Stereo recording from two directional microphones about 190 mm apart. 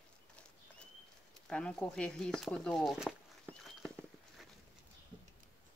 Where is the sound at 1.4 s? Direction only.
5° left (ahead or behind).